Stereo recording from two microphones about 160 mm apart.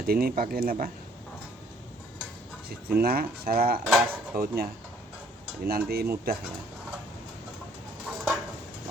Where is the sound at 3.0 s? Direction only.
70° right (ahead or behind).